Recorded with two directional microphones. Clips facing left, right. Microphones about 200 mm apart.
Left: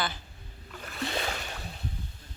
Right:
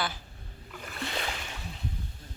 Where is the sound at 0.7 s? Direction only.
5° right (ahead or behind).